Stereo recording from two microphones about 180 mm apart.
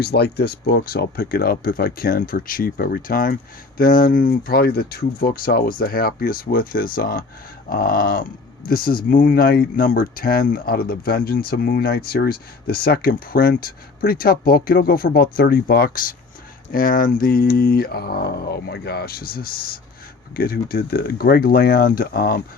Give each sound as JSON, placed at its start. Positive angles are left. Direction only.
{"t": 0.0, "sound": "speech", "side_deg": 60}